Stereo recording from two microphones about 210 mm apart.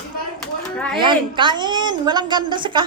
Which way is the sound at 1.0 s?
20° right (ahead or behind).